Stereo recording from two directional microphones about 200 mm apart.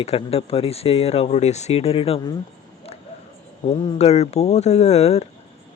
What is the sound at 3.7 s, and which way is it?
Speech, 25° left (ahead or behind).